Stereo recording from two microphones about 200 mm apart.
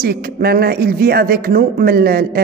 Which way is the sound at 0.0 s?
50° right (ahead or behind).